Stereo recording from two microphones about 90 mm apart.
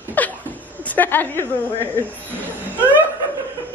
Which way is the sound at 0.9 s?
20° left (ahead or behind).